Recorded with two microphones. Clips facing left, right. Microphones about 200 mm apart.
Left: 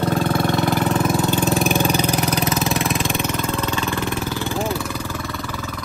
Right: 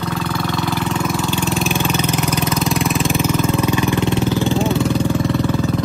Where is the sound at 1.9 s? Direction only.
35° left (ahead or behind).